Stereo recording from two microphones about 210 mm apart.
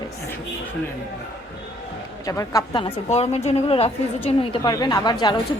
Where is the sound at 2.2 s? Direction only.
15° left (ahead or behind).